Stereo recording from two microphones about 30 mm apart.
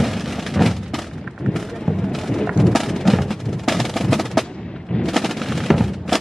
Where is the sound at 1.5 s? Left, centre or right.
Centre.